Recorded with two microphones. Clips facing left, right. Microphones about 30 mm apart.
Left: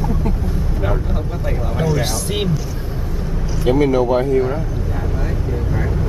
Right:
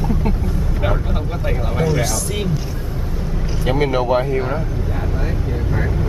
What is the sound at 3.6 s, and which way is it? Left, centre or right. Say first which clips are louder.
Speech: left 3 dB; right.